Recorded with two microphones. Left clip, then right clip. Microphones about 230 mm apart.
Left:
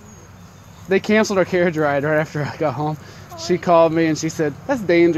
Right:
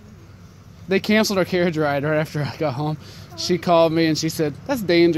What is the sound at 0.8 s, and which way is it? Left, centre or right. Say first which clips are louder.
Speech: left 2 dB; centre.